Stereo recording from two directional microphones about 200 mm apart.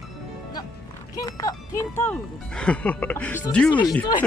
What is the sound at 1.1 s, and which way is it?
Speech, 15° left (ahead or behind).